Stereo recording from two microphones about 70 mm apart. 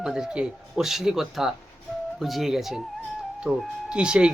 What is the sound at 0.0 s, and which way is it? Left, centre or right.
Speech, centre.